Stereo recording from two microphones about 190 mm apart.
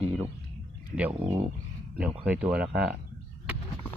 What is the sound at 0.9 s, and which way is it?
Speech, 10° right (ahead or behind).